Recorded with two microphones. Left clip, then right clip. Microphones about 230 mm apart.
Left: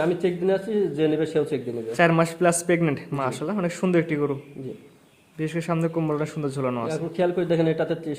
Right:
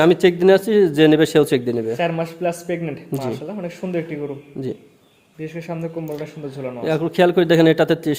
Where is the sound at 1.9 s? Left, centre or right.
Left.